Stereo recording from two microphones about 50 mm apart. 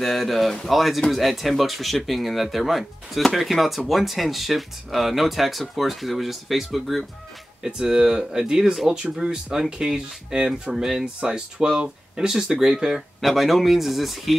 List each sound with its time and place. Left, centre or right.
0.0 s speech: centre
7.6 s speech: centre